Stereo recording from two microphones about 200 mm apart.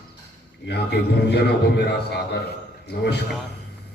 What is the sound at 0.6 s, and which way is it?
A man's voice, 55° left (ahead or behind).